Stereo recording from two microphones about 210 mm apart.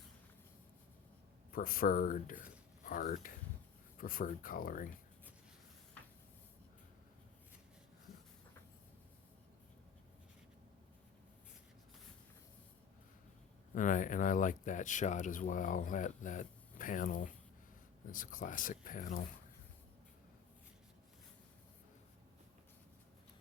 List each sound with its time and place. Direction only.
1.5 s speech: 45° left (ahead or behind)
13.7 s speech: 40° left (ahead or behind)